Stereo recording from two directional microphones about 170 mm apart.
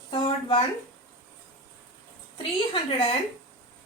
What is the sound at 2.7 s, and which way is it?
Speech, 30° left (ahead or behind).